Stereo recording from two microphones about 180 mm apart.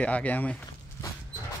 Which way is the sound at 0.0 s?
10° left (ahead or behind).